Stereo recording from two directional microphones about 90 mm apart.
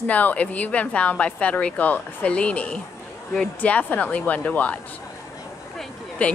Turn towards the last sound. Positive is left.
turn(degrees=15)  # may be behind; listen again after turning